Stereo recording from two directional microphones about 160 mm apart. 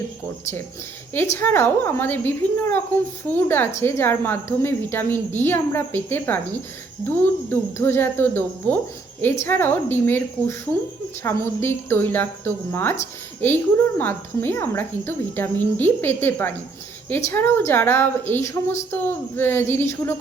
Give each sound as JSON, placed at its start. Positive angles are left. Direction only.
{"t": 1.1, "sound": "a woman's voice", "side_deg": 15}